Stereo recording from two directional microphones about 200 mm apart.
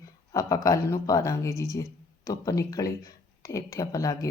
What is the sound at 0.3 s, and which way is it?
Speech, 15° left (ahead or behind).